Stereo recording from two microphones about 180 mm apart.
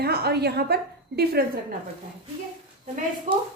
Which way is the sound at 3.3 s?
45° right (ahead or behind).